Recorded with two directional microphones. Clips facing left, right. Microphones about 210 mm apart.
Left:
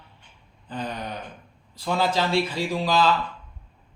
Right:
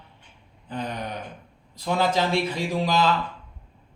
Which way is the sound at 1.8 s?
20° right (ahead or behind).